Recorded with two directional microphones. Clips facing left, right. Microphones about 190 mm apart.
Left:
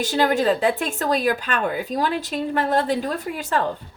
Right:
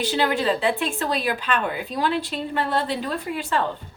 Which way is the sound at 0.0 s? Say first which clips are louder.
Left 3 dB; 45° left (ahead or behind).